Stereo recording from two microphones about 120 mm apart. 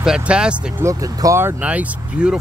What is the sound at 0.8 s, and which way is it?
Speech, 25° right (ahead or behind).